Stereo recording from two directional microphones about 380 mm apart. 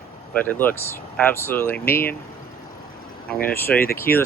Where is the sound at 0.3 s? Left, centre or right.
Centre.